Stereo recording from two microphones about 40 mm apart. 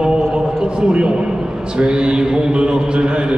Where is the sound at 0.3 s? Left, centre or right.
Centre.